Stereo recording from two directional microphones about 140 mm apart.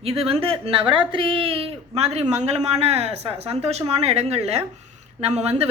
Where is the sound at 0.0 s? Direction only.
45° right (ahead or behind).